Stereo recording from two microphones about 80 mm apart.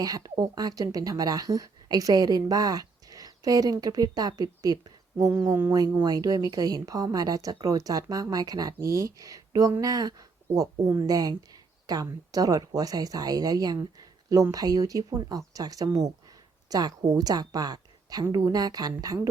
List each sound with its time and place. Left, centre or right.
0.0 s a woman's voice: right
8.8 s a woman's voice: right
14.0 s a sound: right
14.5 s a woman's voice: right